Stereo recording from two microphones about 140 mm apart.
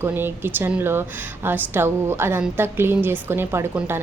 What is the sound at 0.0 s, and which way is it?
A woman's voice, 15° right (ahead or behind).